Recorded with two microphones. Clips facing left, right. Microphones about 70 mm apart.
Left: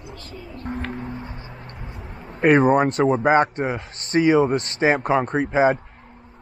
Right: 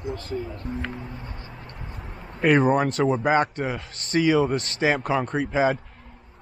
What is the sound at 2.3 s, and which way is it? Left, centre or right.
Speech, left.